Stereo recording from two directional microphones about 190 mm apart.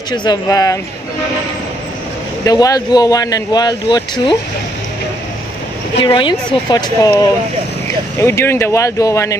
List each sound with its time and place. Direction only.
0.1 s speech: 20° left (ahead or behind)
2.4 s speech: 20° left (ahead or behind)
5.9 s speech: 25° left (ahead or behind)